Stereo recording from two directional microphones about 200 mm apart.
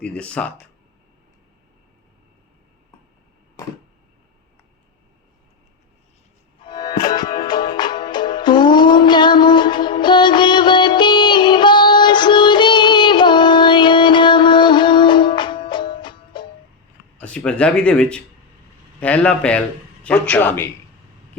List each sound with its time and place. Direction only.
0.0 s speech: 5° left (ahead or behind)
6.6 s music: 20° left (ahead or behind)
17.2 s a man's voice: 5° left (ahead or behind)